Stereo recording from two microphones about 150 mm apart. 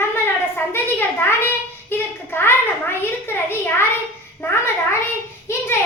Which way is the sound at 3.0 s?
15° left (ahead or behind).